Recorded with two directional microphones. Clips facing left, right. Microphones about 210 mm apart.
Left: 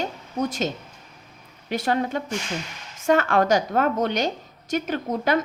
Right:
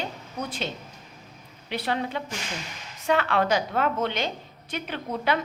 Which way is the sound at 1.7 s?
45° left (ahead or behind).